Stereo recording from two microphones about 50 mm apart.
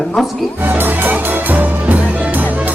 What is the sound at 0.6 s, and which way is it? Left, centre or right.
Music, right.